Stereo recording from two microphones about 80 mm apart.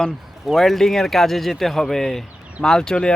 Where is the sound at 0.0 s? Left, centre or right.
Centre.